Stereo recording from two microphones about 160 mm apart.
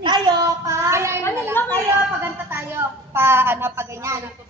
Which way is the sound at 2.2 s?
15° right (ahead or behind).